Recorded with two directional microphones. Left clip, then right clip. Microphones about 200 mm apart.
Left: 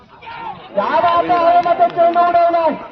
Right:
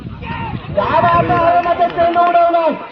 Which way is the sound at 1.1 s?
25° right (ahead or behind).